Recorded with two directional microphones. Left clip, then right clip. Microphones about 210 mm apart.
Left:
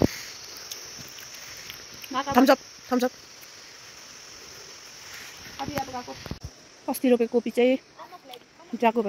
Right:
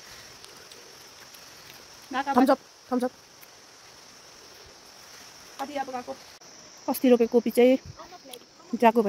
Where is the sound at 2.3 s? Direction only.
Centre (ahead or behind).